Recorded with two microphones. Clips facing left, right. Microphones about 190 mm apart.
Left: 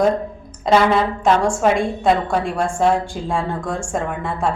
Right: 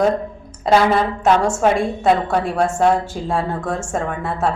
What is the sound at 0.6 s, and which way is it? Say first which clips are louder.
A woman's voice: even; 5° right (ahead or behind).